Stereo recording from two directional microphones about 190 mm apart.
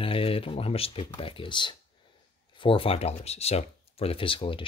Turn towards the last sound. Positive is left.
turn(degrees=25)  # may be behind; listen again after turning